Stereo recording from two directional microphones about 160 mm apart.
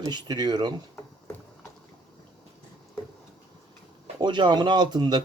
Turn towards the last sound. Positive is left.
turn(degrees=-25)  # may be behind; listen again after turning